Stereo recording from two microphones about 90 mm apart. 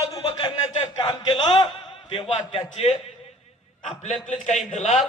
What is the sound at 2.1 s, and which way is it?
Speech, 90° left.